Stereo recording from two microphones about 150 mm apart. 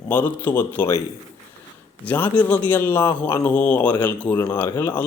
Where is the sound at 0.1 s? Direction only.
15° left (ahead or behind).